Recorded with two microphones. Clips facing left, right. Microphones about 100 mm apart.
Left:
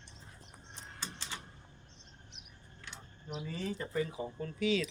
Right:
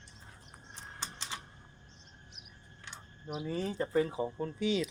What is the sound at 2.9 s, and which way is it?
Speech, 15° right (ahead or behind).